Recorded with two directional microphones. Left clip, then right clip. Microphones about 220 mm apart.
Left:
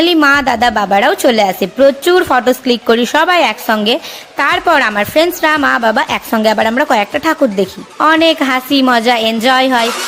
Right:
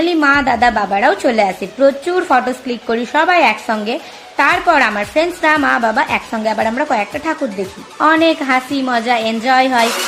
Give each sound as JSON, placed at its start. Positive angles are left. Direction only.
{"t": 0.0, "sound": "a woman's voice", "side_deg": 30}